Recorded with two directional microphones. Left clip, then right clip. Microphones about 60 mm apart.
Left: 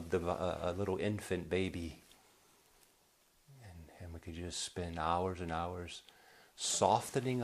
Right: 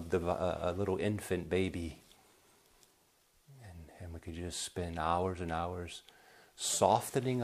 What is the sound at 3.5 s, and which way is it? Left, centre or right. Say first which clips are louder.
Speech: right 2 dB; right.